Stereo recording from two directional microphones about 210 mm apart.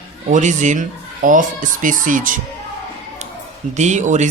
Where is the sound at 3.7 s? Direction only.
35° right (ahead or behind).